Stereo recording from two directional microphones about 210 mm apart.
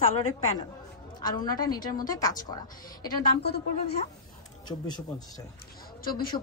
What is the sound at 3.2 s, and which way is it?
Speech, 45° left (ahead or behind).